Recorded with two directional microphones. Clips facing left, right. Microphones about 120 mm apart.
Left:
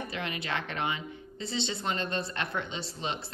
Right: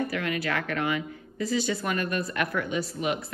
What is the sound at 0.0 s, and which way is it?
Speech, 20° left (ahead or behind).